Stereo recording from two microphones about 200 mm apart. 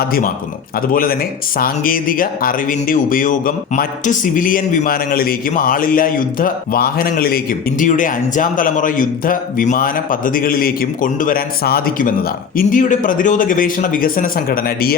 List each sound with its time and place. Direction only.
0.1 s speech: 45° left (ahead or behind)